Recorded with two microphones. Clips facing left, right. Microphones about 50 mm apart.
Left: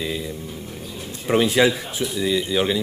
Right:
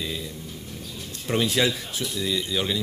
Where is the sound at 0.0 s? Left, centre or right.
Centre.